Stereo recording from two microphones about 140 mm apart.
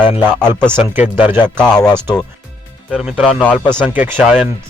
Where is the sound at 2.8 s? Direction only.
5° right (ahead or behind).